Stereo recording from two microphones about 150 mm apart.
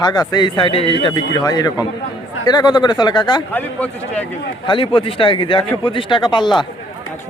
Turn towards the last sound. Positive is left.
turn(degrees=30)  # may be behind; listen again after turning